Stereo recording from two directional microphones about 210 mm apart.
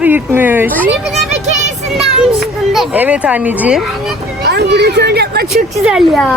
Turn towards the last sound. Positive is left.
turn(degrees=0)  # may be behind; listen again after turning